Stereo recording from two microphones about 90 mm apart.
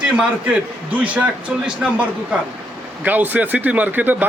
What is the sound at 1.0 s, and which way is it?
Speech, 15° right (ahead or behind).